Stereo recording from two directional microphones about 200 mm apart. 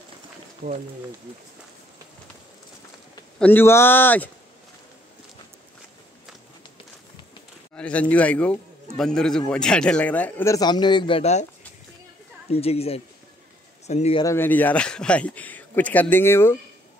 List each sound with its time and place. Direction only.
0.6 s speech: 55° right (ahead or behind)
3.3 s speech: 10° left (ahead or behind)
7.7 s a man's voice: 5° left (ahead or behind); by 11.4 s 30° left (ahead or behind)
12.4 s speech: 30° left (ahead or behind)
14.2 s speech: 10° left (ahead or behind)